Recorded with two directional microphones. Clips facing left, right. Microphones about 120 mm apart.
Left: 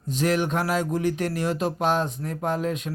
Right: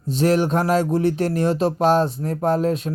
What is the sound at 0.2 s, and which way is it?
Speech, 35° right (ahead or behind).